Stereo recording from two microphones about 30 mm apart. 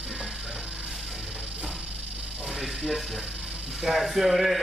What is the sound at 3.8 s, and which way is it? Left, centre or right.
Speech, centre.